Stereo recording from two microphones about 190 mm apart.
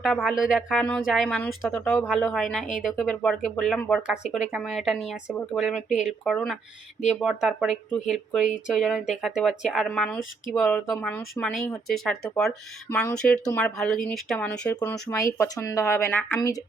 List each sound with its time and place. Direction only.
0.0 s a woman's voice: centre (ahead or behind)